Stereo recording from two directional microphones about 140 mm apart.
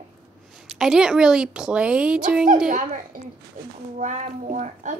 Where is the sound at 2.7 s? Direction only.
65° right (ahead or behind).